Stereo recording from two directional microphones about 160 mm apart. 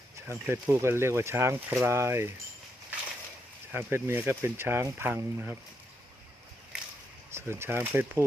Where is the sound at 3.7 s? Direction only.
15° right (ahead or behind).